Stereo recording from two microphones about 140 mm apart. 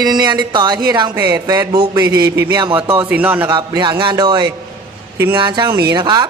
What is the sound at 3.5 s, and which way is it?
Speech, 30° right (ahead or behind).